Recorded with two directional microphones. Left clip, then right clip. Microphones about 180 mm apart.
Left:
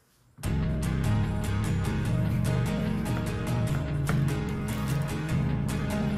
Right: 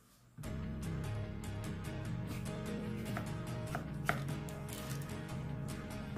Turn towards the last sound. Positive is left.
turn(degrees=0)  # may be behind; listen again after turning